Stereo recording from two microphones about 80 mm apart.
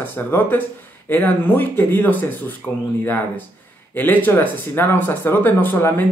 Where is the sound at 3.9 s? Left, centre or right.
Left.